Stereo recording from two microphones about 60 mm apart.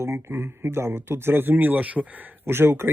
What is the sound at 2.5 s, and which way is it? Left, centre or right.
Speech, right.